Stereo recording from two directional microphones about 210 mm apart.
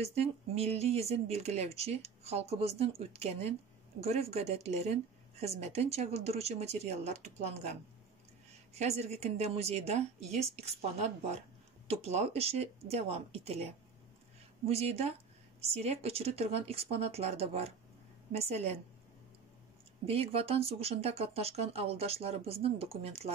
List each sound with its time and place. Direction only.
0.0 s speech: 30° right (ahead or behind)
8.7 s speech: 30° right (ahead or behind)
14.7 s speech: 30° right (ahead or behind)
20.1 s speech: 30° right (ahead or behind)